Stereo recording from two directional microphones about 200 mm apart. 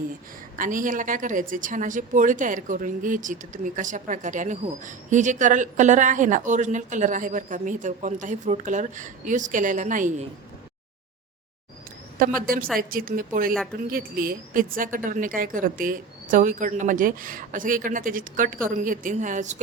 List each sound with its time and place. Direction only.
0.5 s speech: 40° right (ahead or behind)
12.2 s speech: 45° right (ahead or behind)